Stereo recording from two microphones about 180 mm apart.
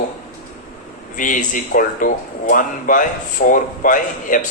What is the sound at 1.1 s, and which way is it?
Speech, 45° left (ahead or behind).